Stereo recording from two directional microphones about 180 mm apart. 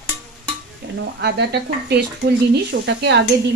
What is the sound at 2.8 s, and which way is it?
Speech, 75° right (ahead or behind).